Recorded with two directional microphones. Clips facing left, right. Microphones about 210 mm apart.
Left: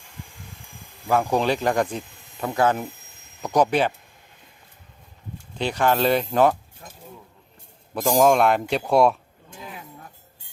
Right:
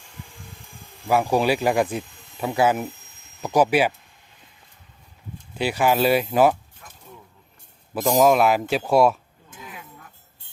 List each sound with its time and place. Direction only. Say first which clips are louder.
1.0 s speech: right 1 dB; 10° right (ahead or behind)
5.5 s speech: right 1 dB; 5° right (ahead or behind)
6.8 s keys jangling: left 5 dB; 30° left (ahead or behind)
7.9 s speech: even; centre (ahead or behind)
9.6 s a sound: left 2 dB; 30° left (ahead or behind)